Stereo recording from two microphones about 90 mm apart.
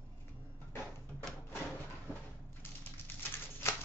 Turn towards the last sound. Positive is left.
turn(degrees=30)  # may be behind; listen again after turning